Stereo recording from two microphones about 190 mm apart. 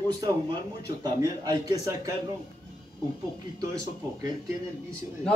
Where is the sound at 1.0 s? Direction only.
20° right (ahead or behind).